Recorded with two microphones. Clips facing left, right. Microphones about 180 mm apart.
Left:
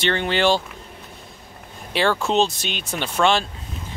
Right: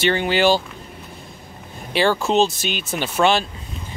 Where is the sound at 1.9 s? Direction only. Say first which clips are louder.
Right 2 dB; centre (ahead or behind).